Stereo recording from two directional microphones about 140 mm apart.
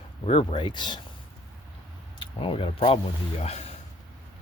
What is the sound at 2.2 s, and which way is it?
Speech, 40° left (ahead or behind).